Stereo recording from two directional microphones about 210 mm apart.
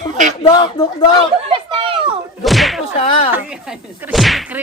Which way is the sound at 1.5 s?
25° right (ahead or behind).